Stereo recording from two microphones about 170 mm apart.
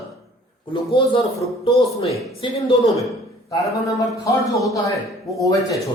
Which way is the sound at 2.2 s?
Centre (ahead or behind).